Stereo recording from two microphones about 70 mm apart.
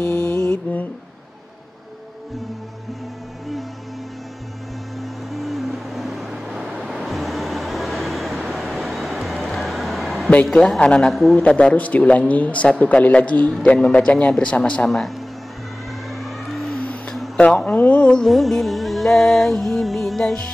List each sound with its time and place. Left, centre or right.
0.0 s mantra: left
5.3 s vehicle: centre
10.4 s a man's voice: centre
11.1 s music: centre
11.4 s a man's voice: centre
14.9 s music: centre
16.2 s vehicle: centre
17.4 s a man's voice: centre
18.1 s music: centre